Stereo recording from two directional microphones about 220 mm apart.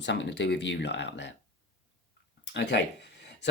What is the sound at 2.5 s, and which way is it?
Speech, 50° left (ahead or behind).